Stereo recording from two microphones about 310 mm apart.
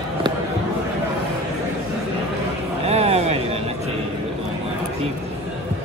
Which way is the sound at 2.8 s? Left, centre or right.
Centre.